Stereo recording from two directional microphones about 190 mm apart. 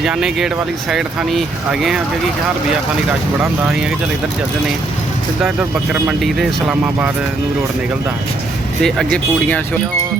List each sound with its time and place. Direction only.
0.0 s speech: 5° right (ahead or behind)
5.4 s speech: 5° right (ahead or behind)
8.8 s speech: 5° left (ahead or behind)